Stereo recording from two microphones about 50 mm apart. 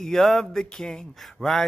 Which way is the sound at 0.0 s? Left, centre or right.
Centre.